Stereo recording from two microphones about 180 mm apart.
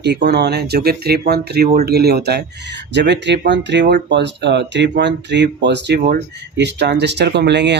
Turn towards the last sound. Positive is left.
turn(degrees=-75)  # may be behind; listen again after turning